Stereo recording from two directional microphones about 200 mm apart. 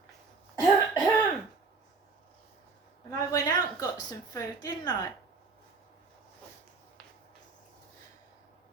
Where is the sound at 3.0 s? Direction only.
15° left (ahead or behind).